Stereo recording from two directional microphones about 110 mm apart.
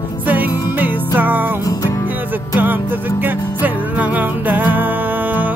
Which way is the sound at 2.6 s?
15° right (ahead or behind).